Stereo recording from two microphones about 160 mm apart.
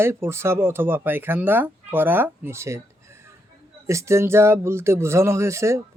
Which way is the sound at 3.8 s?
20° right (ahead or behind).